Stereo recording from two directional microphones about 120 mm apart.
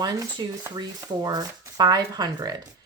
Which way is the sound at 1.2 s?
35° right (ahead or behind).